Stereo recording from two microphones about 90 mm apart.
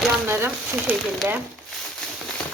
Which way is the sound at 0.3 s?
25° right (ahead or behind).